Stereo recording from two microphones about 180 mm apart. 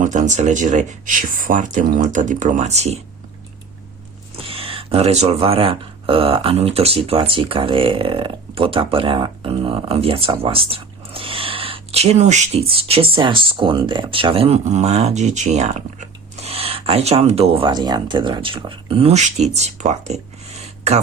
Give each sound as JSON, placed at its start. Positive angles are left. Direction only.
{"t": 0.0, "sound": "speech", "side_deg": -45}
{"t": 4.4, "sound": "speech", "side_deg": -30}